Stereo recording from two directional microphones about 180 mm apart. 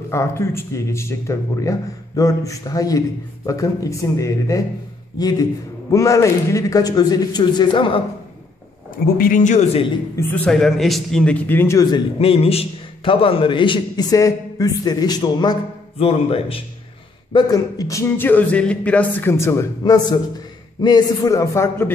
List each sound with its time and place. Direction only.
0.1 s a man's voice: 15° left (ahead or behind)
9.0 s speech: 50° left (ahead or behind)
10.3 s a man's voice: 5° left (ahead or behind)